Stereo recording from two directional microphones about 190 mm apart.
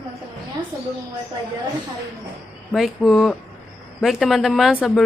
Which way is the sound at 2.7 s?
Centre (ahead or behind).